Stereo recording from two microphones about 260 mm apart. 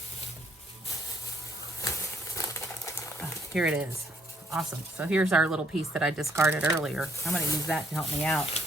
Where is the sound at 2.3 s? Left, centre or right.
Centre.